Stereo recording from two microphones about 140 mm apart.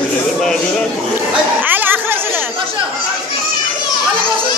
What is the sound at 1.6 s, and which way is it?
Chatter, 15° right (ahead or behind).